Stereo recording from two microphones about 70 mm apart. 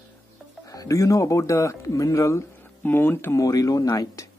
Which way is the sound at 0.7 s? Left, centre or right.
Left.